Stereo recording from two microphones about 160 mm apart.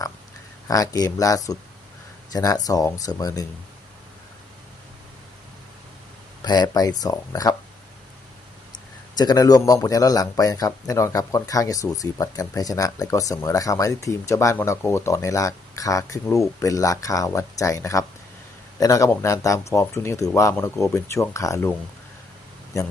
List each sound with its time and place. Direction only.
0.7 s speech: 20° left (ahead or behind)
6.4 s speech: 25° left (ahead or behind)
9.1 s speech: 25° left (ahead or behind)